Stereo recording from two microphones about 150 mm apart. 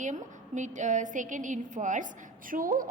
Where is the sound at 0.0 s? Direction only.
55° right (ahead or behind).